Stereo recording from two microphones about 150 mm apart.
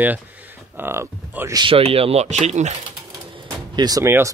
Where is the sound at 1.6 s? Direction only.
40° right (ahead or behind).